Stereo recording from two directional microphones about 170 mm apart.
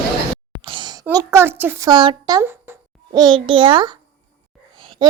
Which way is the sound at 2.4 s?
15° right (ahead or behind).